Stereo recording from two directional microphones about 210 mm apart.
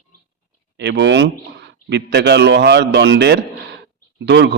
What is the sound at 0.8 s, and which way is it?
A man's voice, 55° right (ahead or behind).